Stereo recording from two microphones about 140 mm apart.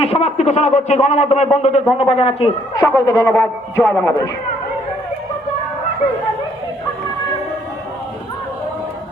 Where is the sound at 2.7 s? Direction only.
20° left (ahead or behind).